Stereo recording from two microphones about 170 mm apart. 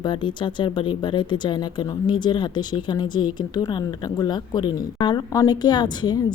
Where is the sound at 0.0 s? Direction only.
25° left (ahead or behind).